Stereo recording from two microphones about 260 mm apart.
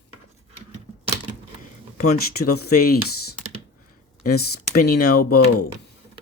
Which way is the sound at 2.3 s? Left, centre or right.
Left.